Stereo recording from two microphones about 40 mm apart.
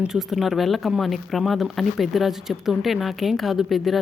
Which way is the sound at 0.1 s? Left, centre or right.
Centre.